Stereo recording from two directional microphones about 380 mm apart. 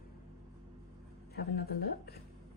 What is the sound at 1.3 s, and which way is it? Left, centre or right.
Speech, left.